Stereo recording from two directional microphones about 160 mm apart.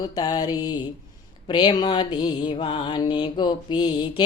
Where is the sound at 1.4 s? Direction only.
25° left (ahead or behind).